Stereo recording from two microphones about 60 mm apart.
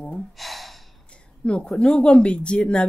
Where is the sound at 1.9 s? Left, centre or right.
Centre.